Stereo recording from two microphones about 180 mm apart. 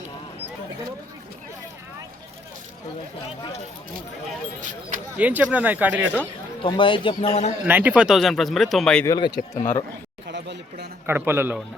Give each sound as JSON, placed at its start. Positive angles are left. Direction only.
{"t": 4.6, "sound": "speech", "side_deg": -45}
{"t": 5.1, "sound": "speech", "side_deg": -5}
{"t": 6.6, "sound": "speech", "side_deg": 30}
{"t": 7.7, "sound": "speech", "side_deg": -10}
{"t": 9.0, "sound": "speech", "side_deg": 25}
{"t": 9.6, "sound": "speech", "side_deg": 45}
{"t": 10.2, "sound": "a sound", "side_deg": -70}
{"t": 11.0, "sound": "speech", "side_deg": -10}